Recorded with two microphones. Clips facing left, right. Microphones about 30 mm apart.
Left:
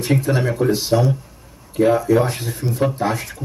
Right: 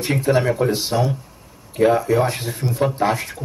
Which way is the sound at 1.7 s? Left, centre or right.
Centre.